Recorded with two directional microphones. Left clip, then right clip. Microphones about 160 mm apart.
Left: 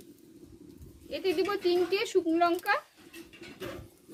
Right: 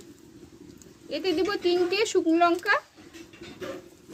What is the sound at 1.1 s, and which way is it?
Speech, 35° right (ahead or behind).